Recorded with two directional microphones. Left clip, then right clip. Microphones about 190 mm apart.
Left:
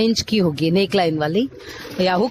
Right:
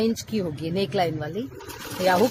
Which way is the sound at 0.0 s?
45° left (ahead or behind).